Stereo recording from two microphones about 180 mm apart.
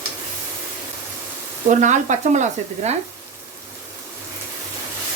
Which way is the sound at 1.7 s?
45° right (ahead or behind).